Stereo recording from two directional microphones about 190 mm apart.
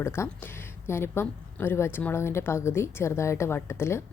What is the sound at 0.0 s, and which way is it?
A woman's voice, 15° left (ahead or behind).